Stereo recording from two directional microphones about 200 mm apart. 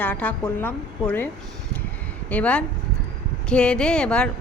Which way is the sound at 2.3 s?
5° left (ahead or behind).